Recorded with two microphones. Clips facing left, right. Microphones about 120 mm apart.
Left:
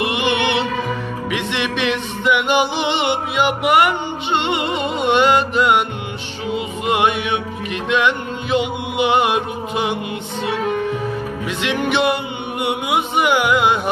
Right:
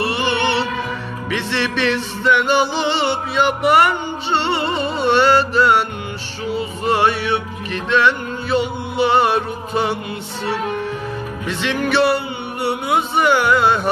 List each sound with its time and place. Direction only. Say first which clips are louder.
0.0 s music: even; 20° left (ahead or behind)
11.4 s music: right 1 dB; 15° left (ahead or behind)